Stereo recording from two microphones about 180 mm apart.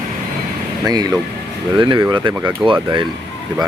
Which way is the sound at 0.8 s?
20° right (ahead or behind).